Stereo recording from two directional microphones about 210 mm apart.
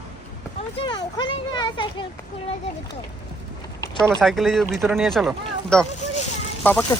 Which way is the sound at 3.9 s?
Centre (ahead or behind).